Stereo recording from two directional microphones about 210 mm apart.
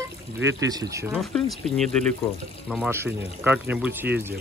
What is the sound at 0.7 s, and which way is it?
Speech, 15° right (ahead or behind).